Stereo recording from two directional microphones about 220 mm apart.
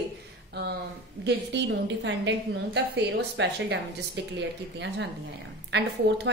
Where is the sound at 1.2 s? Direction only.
50° right (ahead or behind).